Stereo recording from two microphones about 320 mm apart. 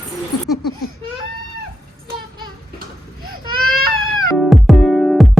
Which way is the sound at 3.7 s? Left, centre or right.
Right.